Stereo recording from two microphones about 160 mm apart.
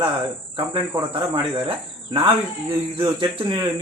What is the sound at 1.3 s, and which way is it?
Speech, 35° right (ahead or behind).